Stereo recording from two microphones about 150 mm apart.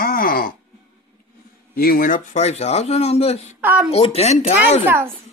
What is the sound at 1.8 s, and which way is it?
Speech, 75° left (ahead or behind).